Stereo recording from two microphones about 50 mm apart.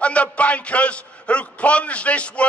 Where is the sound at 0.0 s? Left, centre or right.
Left.